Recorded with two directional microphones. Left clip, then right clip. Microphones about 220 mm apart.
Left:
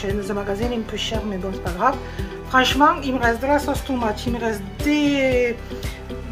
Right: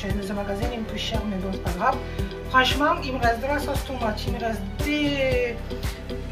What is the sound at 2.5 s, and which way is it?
A woman's voice, 20° left (ahead or behind).